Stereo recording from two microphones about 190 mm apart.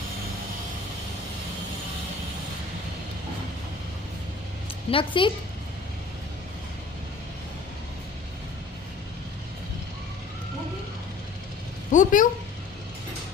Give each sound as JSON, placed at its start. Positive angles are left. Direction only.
{"t": 4.9, "sound": "a woman's voice", "side_deg": 25}
{"t": 11.9, "sound": "speech", "side_deg": 45}